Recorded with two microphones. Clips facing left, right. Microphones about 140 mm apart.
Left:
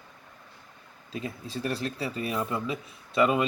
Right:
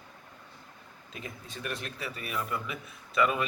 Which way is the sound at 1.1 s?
30° left (ahead or behind).